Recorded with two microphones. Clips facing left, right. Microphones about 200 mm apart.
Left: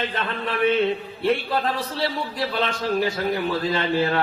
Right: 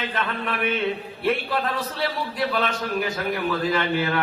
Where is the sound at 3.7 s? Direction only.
30° left (ahead or behind).